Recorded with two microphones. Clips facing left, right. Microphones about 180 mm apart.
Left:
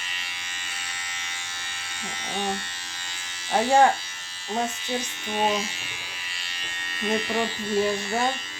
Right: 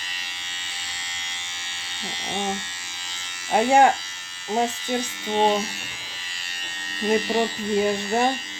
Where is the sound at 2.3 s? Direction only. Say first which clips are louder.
Right 1 dB; 20° right (ahead or behind).